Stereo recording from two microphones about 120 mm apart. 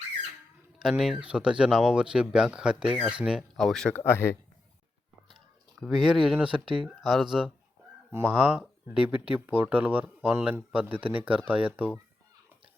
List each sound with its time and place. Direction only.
0.8 s speech: centre (ahead or behind)
3.9 s speech: 20° left (ahead or behind)
5.8 s speech: centre (ahead or behind)
8.1 s speech: 20° right (ahead or behind)